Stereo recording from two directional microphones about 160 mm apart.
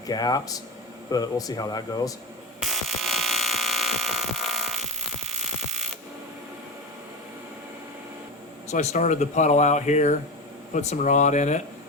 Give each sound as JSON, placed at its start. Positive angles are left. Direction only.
{"t": 0.1, "sound": "speech", "side_deg": 25}
{"t": 2.6, "sound": "a sound", "side_deg": 0}
{"t": 8.7, "sound": "speech", "side_deg": 50}